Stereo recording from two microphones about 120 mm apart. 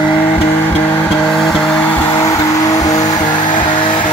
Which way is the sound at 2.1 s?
25° left (ahead or behind).